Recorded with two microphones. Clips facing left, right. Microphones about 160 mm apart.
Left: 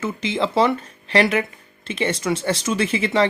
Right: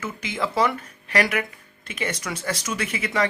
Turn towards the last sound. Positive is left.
turn(degrees=30)  # may be behind; listen again after turning